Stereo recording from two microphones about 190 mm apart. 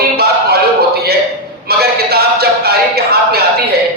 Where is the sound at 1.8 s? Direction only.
55° right (ahead or behind).